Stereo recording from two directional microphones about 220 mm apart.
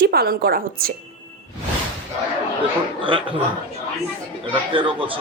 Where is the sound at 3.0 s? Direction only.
25° right (ahead or behind).